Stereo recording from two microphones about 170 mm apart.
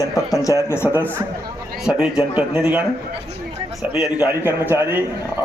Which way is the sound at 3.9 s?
5° right (ahead or behind).